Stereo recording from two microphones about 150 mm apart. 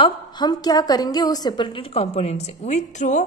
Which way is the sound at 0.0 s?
30° left (ahead or behind).